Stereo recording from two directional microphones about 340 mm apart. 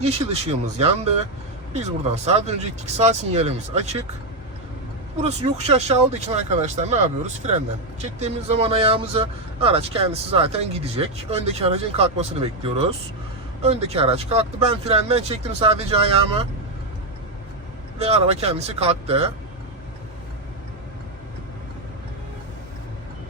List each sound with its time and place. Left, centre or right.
0.0 s speech: centre
5.2 s speech: centre
8.0 s speech: centre
18.0 s speech: centre